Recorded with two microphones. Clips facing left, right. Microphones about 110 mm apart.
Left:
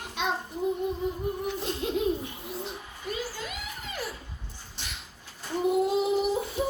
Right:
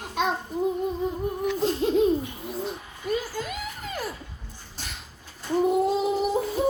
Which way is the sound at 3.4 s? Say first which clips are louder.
Right 5 dB; 45° right (ahead or behind).